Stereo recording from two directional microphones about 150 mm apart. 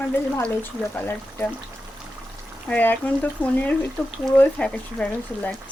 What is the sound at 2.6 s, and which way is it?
Speech, 10° left (ahead or behind).